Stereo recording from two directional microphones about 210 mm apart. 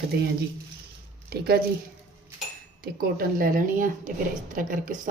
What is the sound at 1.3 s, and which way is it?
Speech, 50° right (ahead or behind).